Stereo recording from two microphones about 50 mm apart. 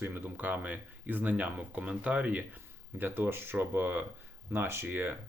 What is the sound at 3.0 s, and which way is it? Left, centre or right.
Speech, right.